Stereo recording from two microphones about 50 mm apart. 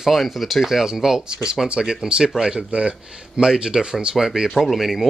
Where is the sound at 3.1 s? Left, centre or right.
Centre.